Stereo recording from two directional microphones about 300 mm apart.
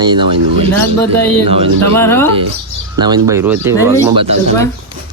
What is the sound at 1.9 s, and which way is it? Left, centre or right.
Speech, centre.